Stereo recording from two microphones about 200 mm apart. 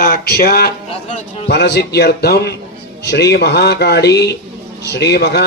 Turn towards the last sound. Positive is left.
turn(degrees=55)  # may be behind; listen again after turning